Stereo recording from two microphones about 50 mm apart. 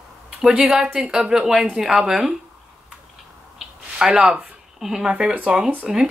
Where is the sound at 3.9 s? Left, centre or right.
Centre.